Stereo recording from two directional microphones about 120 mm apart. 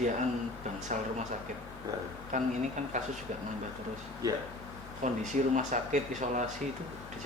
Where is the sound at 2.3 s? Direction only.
90° right.